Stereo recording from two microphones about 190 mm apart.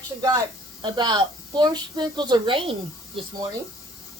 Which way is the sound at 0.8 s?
25° right (ahead or behind).